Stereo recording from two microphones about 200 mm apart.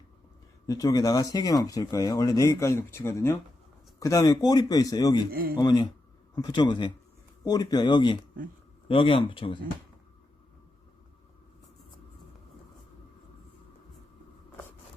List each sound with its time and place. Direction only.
0.7 s speech: 15° left (ahead or behind)
5.3 s a man's voice: 45° right (ahead or behind)
5.5 s speech: 20° left (ahead or behind)